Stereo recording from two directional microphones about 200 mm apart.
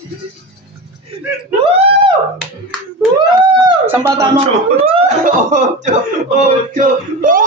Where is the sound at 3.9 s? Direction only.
10° right (ahead or behind).